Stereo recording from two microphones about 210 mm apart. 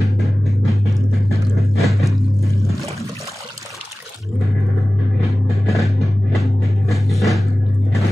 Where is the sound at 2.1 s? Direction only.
15° left (ahead or behind).